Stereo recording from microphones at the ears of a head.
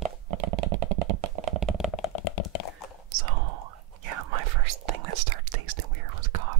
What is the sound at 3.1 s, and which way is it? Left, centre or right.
Whispering, right.